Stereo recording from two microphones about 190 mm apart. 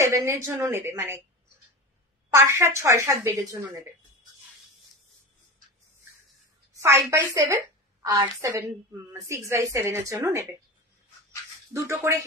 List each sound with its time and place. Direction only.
0.0 s a woman's voice: 15° right (ahead or behind)
2.3 s a woman's voice: 15° right (ahead or behind)
6.7 s a woman's voice: 15° right (ahead or behind)
11.7 s a woman's voice: 15° right (ahead or behind)